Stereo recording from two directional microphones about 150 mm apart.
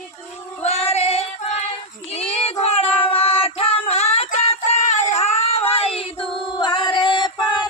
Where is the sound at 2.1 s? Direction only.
45° left (ahead or behind).